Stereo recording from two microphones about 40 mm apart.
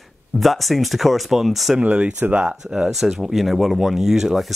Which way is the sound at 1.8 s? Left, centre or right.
Right.